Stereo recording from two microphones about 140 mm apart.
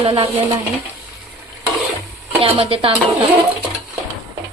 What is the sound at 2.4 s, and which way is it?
Speech, 40° right (ahead or behind).